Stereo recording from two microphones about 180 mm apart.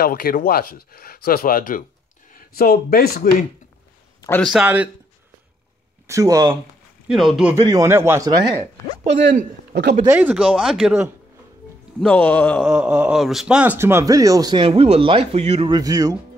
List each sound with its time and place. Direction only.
0.0 s speech: 55° left (ahead or behind)
4.4 s speech: centre (ahead or behind)
6.0 s speech: 20° right (ahead or behind)
7.1 s speech: centre (ahead or behind)
7.6 s speech: 15° right (ahead or behind)
9.7 s a sound: 65° right (ahead or behind)
10.0 s speech: 10° right (ahead or behind)
12.0 s speech: 5° left (ahead or behind)
12.6 s speech: 10° right (ahead or behind); by 15.7 s 35° right (ahead or behind)
15.7 s speech: 20° right (ahead or behind)